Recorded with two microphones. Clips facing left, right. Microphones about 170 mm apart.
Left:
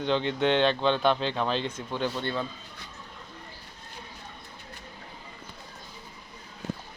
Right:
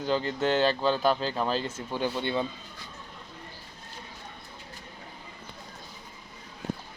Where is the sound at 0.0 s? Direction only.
5° right (ahead or behind).